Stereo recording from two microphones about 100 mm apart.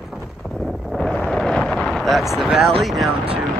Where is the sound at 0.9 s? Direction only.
Centre (ahead or behind).